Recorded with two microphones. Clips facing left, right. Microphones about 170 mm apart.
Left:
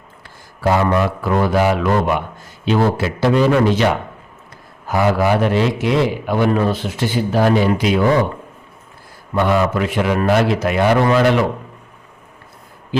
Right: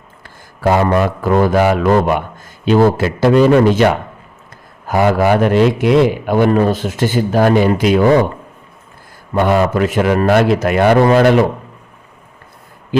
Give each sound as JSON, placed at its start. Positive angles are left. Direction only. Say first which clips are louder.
{"t": 0.6, "sound": "a man's voice", "louder": "right 3 dB", "side_deg": -50}
{"t": 4.9, "sound": "a man's voice", "louder": "right 3 dB", "side_deg": -55}
{"t": 9.3, "sound": "a man's voice", "louder": "right 3 dB", "side_deg": -50}